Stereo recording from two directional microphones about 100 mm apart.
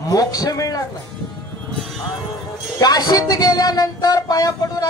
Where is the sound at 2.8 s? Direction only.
40° left (ahead or behind).